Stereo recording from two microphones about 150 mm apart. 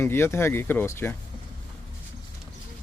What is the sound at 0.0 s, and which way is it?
Speech, 15° left (ahead or behind).